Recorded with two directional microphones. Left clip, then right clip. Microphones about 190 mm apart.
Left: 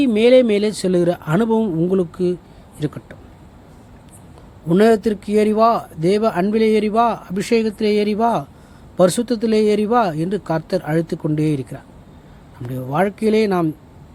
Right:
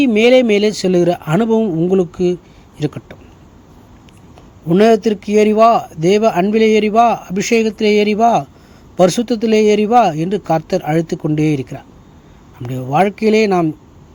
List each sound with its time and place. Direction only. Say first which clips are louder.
0.0 s speech: right 2 dB; 15° right (ahead or behind)
4.7 s speech: right 3 dB; 15° right (ahead or behind)